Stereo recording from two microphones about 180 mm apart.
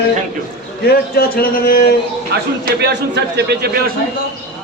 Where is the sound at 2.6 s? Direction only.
70° right (ahead or behind).